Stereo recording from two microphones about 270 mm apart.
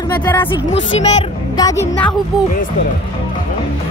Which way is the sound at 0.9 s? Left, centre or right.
Left.